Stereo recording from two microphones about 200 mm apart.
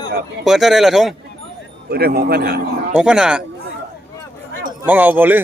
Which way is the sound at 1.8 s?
50° right (ahead or behind).